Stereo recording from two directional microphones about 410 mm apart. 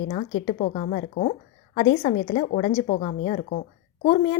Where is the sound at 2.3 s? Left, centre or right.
Centre.